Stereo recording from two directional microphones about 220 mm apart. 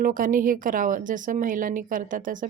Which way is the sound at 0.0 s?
40° right (ahead or behind).